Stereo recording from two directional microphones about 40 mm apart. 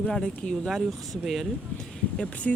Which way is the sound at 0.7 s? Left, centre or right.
Centre.